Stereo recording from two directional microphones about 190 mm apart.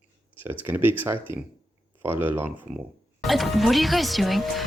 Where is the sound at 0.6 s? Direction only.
10° right (ahead or behind).